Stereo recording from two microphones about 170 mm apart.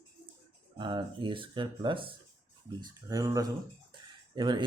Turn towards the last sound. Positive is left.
turn(degrees=-25)  # may be behind; listen again after turning